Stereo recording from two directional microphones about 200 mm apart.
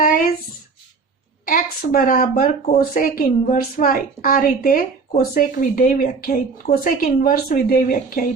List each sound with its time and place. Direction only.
1.5 s a woman's voice: 45° left (ahead or behind)